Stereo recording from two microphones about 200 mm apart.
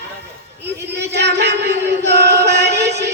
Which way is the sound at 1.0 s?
55° right (ahead or behind).